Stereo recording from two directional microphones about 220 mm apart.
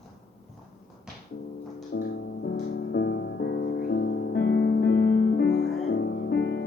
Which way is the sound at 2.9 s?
45° left (ahead or behind).